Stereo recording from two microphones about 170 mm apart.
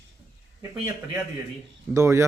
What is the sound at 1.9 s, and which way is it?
Speech, 15° right (ahead or behind).